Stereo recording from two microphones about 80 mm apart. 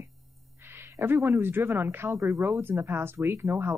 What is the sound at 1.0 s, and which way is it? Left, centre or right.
Speech, right.